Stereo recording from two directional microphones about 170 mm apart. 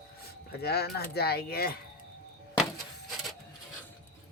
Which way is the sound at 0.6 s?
70° left (ahead or behind).